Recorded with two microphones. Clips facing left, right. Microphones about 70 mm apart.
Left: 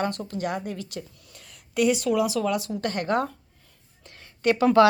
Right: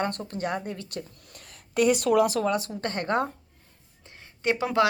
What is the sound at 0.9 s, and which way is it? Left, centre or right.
Speech, right.